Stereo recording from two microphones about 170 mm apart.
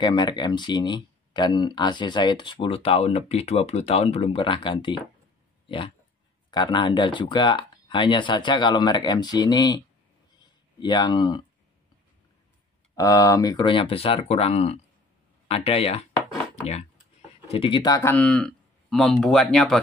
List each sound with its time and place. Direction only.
0.0 s speech: 25° left (ahead or behind)
12.9 s speech: 20° left (ahead or behind); by 16.1 s 35° left (ahead or behind)
17.5 s speech: 30° left (ahead or behind); by 19.8 s 5° left (ahead or behind)